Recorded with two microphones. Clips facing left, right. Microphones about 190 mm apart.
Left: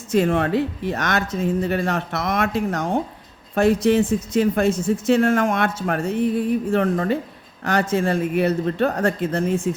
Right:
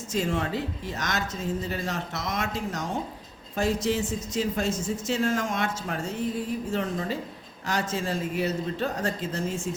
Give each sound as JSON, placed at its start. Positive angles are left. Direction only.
{"t": 0.1, "sound": "speech", "side_deg": 60}